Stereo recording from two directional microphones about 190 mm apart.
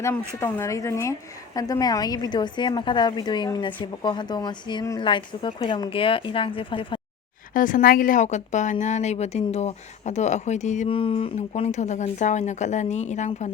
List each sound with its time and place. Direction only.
0.3 s a woman's voice: 15° left (ahead or behind)
7.5 s speech: 45° left (ahead or behind)